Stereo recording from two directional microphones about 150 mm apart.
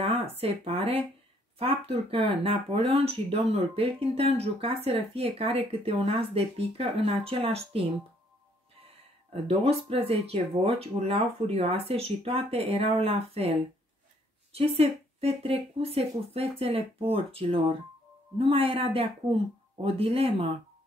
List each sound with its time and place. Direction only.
0.0 s speech: 40° right (ahead or behind)
9.3 s speech: 40° right (ahead or behind)